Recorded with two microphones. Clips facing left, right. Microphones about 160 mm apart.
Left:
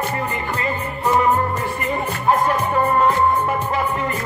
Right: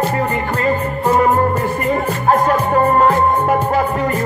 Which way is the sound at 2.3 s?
50° right (ahead or behind).